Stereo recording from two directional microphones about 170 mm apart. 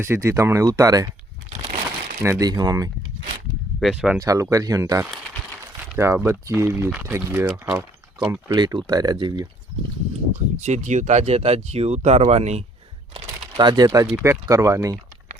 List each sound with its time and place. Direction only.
0.0 s speech: 15° right (ahead or behind)
2.2 s speech: 15° right (ahead or behind)
3.8 s speech: centre (ahead or behind)
4.2 s speech: 20° right (ahead or behind)
8.5 s speech: 25° right (ahead or behind)
10.6 s speech: 45° right (ahead or behind)
13.1 s speech: 25° right (ahead or behind)